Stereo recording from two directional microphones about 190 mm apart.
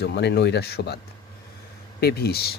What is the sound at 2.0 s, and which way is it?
Speech, 55° left (ahead or behind).